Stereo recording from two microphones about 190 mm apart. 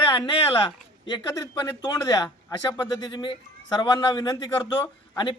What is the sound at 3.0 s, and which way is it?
A man's voice, 25° left (ahead or behind).